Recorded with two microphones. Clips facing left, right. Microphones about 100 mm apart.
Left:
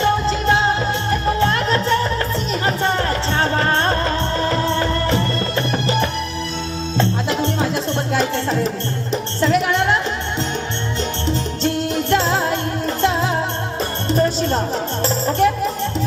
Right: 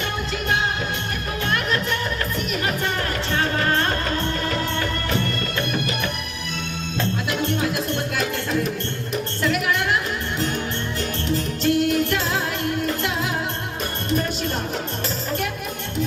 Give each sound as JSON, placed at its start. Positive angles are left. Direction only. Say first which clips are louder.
{"t": 0.0, "sound": "music", "louder": "left 10 dB", "side_deg": 30}
{"t": 11.3, "sound": "music", "louder": "right 1 dB", "side_deg": 30}